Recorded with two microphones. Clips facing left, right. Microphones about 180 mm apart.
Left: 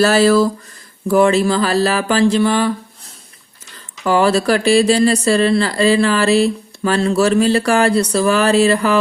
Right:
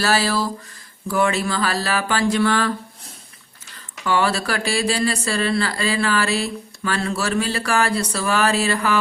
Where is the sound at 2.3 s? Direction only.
20° left (ahead or behind).